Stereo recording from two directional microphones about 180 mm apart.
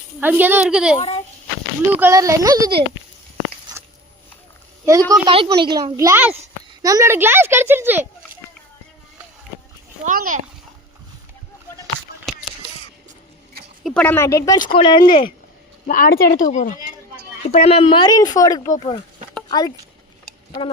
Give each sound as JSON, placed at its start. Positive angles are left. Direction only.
{"t": 0.2, "sound": "a woman's voice", "side_deg": -10}
{"t": 0.9, "sound": "a child's voice", "side_deg": 35}
{"t": 1.9, "sound": "speech", "side_deg": -10}
{"t": 3.7, "sound": "a sound", "side_deg": -20}
{"t": 4.9, "sound": "a woman's voice", "side_deg": -20}
{"t": 10.0, "sound": "a child's voice", "side_deg": -50}
{"t": 13.8, "sound": "speech", "side_deg": 5}
{"t": 15.9, "sound": "speech", "side_deg": 55}
{"t": 18.7, "sound": "speech", "side_deg": 35}
{"t": 19.5, "sound": "speech", "side_deg": 20}